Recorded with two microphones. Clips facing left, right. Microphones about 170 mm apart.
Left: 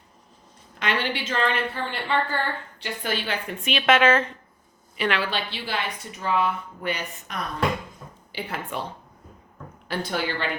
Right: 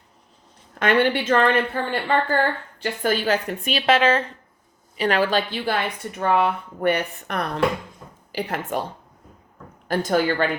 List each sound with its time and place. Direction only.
0.8 s a woman's voice: 50° right (ahead or behind)
8.3 s a woman's voice: 40° right (ahead or behind)
9.9 s a woman's voice: 45° right (ahead or behind)